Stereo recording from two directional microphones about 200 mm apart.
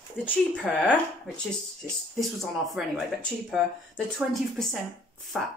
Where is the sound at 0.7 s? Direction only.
5° right (ahead or behind).